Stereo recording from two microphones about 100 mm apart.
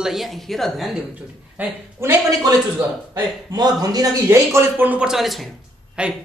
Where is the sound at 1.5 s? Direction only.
25° right (ahead or behind).